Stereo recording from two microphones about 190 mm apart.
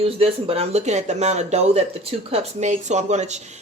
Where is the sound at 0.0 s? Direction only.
30° right (ahead or behind).